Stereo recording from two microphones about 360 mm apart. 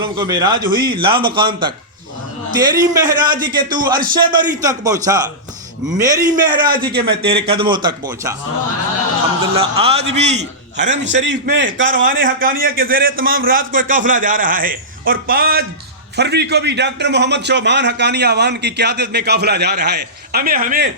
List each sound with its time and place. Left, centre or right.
0.0 s speech: centre
9.6 s a man's voice: centre